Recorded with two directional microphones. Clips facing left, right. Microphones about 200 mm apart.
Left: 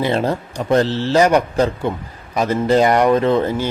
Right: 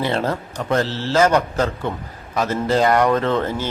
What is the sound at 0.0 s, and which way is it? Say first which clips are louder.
Speech: left 3 dB; 15° left (ahead or behind).